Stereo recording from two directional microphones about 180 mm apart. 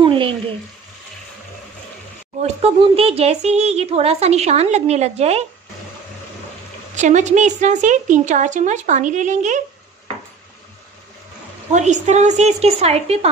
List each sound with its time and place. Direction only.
0.0 s frying: 30° right (ahead or behind)
2.4 s speech: 35° right (ahead or behind)
7.0 s speech: 40° right (ahead or behind)
11.7 s speech: 40° right (ahead or behind)